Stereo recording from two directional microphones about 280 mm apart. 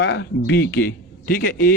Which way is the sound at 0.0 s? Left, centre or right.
Left.